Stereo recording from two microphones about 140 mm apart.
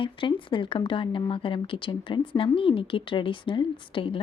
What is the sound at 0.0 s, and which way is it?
Speech, 35° left (ahead or behind).